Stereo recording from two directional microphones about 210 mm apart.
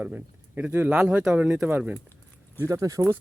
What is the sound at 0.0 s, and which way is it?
Speech, 5° right (ahead or behind).